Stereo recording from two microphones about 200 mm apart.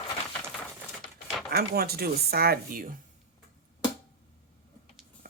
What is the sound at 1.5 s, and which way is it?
Speech, 50° right (ahead or behind).